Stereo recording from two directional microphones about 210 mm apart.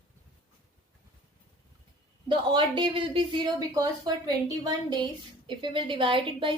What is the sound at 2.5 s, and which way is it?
Speech, 25° right (ahead or behind).